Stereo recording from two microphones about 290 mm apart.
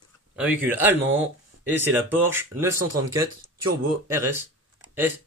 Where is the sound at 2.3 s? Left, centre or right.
Centre.